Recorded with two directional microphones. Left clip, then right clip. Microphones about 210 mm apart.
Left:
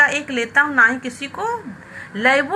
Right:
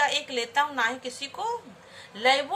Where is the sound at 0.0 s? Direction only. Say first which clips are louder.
Left 9 dB; 15° right (ahead or behind).